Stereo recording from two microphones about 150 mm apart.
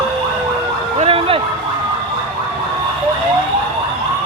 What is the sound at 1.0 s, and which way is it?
Emergency vehicle, 40° right (ahead or behind).